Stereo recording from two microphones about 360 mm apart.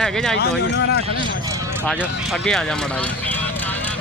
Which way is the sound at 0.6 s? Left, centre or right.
Left.